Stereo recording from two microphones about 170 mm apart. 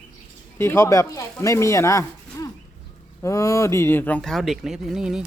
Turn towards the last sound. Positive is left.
turn(degrees=-5)  # may be behind; listen again after turning